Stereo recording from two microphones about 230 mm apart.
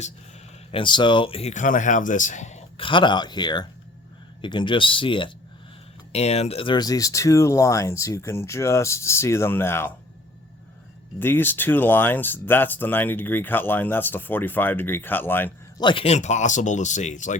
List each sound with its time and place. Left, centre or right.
0.7 s speech: left
11.2 s speech: centre
15.8 s speech: left